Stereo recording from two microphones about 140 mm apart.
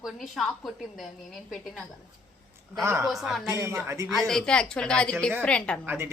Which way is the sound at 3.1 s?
Centre (ahead or behind).